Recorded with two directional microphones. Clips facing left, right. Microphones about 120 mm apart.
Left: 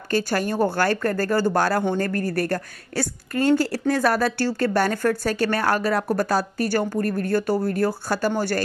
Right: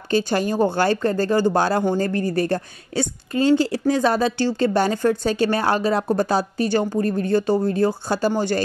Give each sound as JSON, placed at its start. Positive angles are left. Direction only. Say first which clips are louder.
{"t": 0.1, "sound": "speech", "louder": "right 3 dB", "side_deg": -20}